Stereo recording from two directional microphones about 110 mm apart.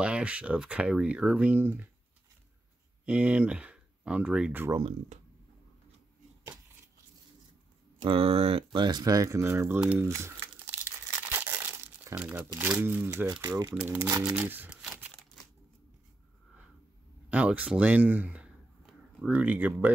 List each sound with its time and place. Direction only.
0.0 s speech: 10° right (ahead or behind)
3.1 s speech: 10° right (ahead or behind)
8.0 s speech: 60° right (ahead or behind)
8.8 s speech: 35° right (ahead or behind)
9.9 s crumpling: 25° right (ahead or behind)
12.2 s speech: 15° right (ahead or behind)
13.4 s speech: 30° right (ahead or behind)
13.7 s speech: 20° right (ahead or behind)
17.3 s speech: 10° right (ahead or behind)